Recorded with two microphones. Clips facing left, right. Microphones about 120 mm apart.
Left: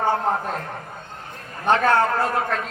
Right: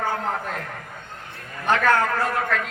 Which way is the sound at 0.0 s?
25° left (ahead or behind).